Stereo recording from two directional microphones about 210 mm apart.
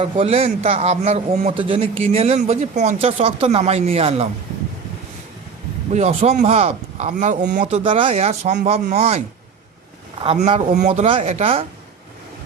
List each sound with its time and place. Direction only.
0.0 s speech: 30° right (ahead or behind)
5.9 s speech: 30° right (ahead or behind)
7.6 s speech: 25° right (ahead or behind)
10.2 s speech: 30° right (ahead or behind)